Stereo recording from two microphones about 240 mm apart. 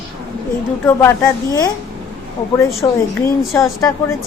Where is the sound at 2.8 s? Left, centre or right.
Centre.